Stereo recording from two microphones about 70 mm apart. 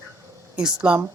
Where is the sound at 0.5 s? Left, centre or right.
Centre.